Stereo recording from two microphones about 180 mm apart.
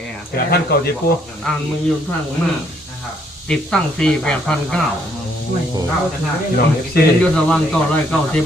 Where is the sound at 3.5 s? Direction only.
5° left (ahead or behind).